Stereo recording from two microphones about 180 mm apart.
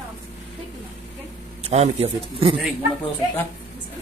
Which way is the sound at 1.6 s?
35° right (ahead or behind).